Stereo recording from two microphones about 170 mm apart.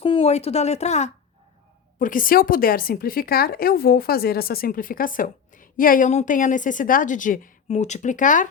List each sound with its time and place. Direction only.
0.0 s speech: 35° left (ahead or behind)
2.0 s speech: 55° left (ahead or behind)